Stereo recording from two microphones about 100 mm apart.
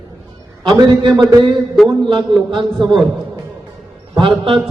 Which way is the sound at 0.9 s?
50° right (ahead or behind).